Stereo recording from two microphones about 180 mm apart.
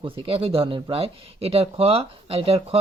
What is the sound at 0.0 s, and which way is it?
Speech, 30° right (ahead or behind).